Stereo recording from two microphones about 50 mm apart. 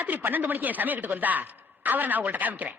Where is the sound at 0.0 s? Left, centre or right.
Right.